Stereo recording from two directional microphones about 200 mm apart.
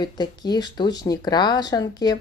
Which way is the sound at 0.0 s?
20° left (ahead or behind).